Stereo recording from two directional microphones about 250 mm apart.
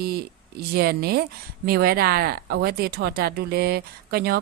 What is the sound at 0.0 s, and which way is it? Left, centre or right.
Speech, right.